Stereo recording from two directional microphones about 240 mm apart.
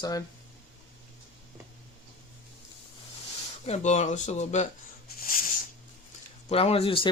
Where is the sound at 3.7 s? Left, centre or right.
Left.